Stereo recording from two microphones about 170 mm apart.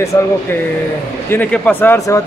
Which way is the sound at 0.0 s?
15° left (ahead or behind).